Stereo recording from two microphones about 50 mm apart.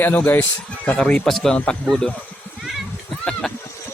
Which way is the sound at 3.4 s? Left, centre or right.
Centre.